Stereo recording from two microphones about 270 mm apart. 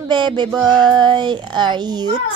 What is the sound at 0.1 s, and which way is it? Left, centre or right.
A child's voice, centre.